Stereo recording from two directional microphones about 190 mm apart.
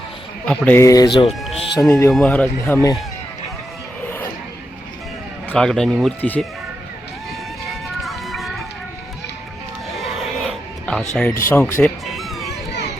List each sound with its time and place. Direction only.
0.4 s speech: 5° left (ahead or behind); by 1.3 s 25° left (ahead or behind)
1.3 s speech: centre (ahead or behind)
1.8 s speech: 15° left (ahead or behind)
5.5 s speech: 5° left (ahead or behind)
8.0 s music: centre (ahead or behind)
9.9 s music: centre (ahead or behind)
11.1 s speech: 5° left (ahead or behind)
11.4 s music: 10° left (ahead or behind)